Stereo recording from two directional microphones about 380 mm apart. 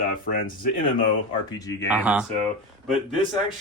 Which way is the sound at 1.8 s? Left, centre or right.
Centre.